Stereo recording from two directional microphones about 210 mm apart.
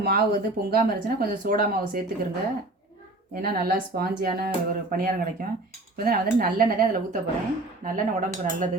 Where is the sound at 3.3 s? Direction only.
45° right (ahead or behind).